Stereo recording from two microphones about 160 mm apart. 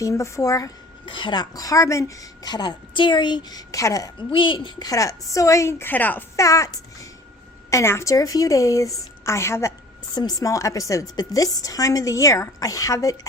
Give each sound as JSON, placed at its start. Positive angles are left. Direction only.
{"t": 0.0, "sound": "a woman's voice", "side_deg": 20}
{"t": 1.0, "sound": "a woman's voice", "side_deg": 30}
{"t": 4.3, "sound": "a woman's voice", "side_deg": 30}